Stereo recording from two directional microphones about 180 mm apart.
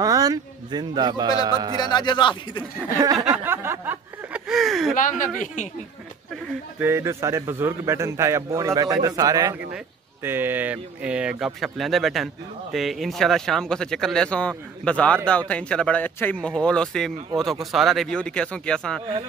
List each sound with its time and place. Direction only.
0.0 s speech: 20° right (ahead or behind)
1.8 s speech: 25° left (ahead or behind)
3.0 s a man's voice: 20° right (ahead or behind); by 4.9 s centre (ahead or behind)
4.9 s speech: 45° left (ahead or behind)
6.8 s a man's voice: 15° right (ahead or behind); by 19.0 s 5° left (ahead or behind)